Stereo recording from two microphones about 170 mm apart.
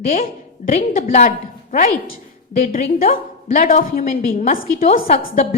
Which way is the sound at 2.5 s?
50° left (ahead or behind).